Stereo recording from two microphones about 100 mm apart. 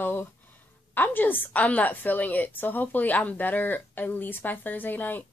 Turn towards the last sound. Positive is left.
turn(degrees=20)  # may be behind; listen again after turning